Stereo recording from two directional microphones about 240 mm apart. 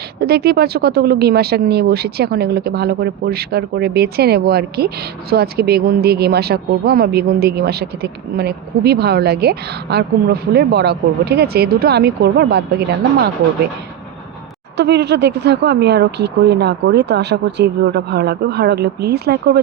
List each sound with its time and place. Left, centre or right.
0.2 s speech: right
14.8 s speech: right